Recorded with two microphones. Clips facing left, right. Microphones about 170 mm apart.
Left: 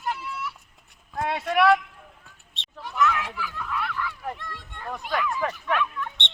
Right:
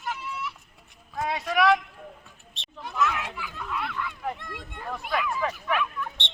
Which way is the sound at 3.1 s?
15° right (ahead or behind).